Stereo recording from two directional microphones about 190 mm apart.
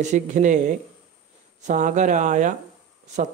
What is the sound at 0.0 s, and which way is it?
Speech, 40° right (ahead or behind).